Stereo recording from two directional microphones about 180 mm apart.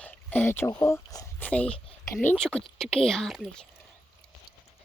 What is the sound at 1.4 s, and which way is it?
A child's voice, 5° left (ahead or behind).